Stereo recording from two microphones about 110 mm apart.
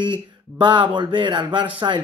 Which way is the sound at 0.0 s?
45° right (ahead or behind).